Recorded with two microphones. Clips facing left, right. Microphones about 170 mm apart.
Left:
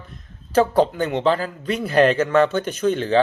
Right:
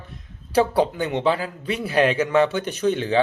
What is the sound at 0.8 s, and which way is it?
Speech, 10° right (ahead or behind).